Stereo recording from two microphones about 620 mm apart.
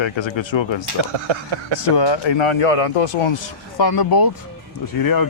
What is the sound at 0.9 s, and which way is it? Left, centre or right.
Speech, right.